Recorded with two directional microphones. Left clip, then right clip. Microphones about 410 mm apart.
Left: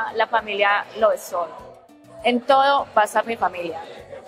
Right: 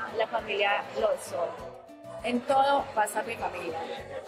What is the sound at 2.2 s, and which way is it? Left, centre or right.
Speech, left.